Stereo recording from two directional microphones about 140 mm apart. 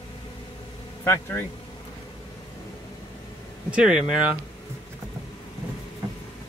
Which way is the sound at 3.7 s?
5° right (ahead or behind).